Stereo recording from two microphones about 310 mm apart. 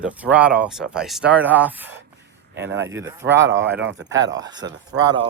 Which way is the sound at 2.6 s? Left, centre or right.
Right.